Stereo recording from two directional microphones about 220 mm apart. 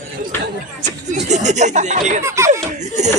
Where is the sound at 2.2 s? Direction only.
10° right (ahead or behind).